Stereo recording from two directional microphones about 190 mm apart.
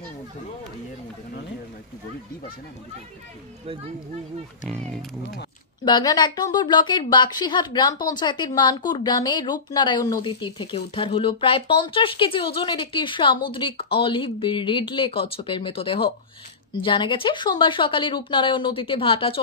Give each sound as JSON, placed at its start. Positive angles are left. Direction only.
{"t": 4.6, "sound": "speech", "side_deg": 5}
{"t": 5.9, "sound": "a woman's voice", "side_deg": 20}